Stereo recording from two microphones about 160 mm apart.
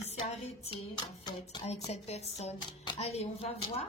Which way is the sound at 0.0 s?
45° left (ahead or behind).